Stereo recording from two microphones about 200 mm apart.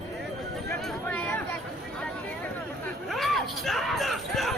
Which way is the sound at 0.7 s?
10° left (ahead or behind).